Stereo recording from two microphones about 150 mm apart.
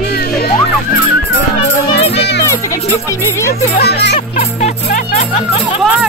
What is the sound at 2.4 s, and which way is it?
Speech, 20° left (ahead or behind).